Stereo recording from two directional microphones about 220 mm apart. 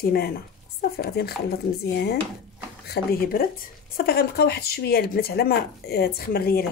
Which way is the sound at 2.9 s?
45° left (ahead or behind).